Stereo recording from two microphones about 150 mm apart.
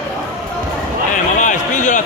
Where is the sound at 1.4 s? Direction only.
55° left (ahead or behind).